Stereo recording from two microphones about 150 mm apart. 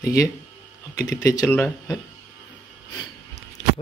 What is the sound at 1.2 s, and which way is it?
Speech, 20° left (ahead or behind).